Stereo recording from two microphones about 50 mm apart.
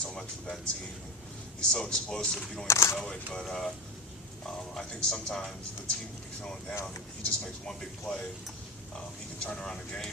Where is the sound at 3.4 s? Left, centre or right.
Centre.